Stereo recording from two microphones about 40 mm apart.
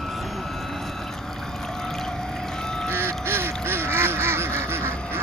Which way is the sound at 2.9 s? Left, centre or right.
Right.